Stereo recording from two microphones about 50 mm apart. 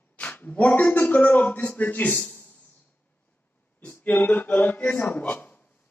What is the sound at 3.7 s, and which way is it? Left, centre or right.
Speech, left.